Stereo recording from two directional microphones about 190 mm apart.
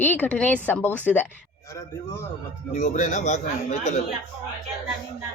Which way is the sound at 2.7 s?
40° left (ahead or behind).